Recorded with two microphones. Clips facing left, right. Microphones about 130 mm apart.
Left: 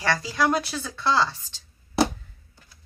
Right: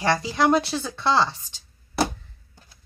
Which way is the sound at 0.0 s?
20° right (ahead or behind).